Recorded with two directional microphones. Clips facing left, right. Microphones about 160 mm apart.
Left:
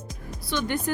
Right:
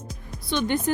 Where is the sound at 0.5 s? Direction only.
20° right (ahead or behind).